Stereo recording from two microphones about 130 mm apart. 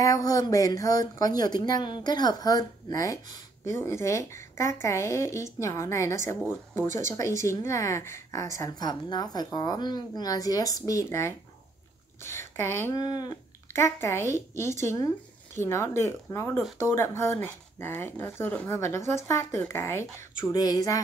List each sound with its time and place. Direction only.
0.0 s a woman's voice: 25° left (ahead or behind)
12.9 s speech: 30° left (ahead or behind)
13.7 s speech: 20° left (ahead or behind)